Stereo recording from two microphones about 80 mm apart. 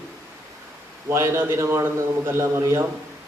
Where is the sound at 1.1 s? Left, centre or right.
Right.